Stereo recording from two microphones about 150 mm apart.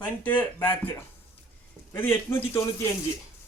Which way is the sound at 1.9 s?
15° left (ahead or behind).